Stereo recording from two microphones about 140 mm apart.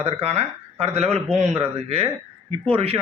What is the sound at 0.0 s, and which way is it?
Speech, 50° right (ahead or behind).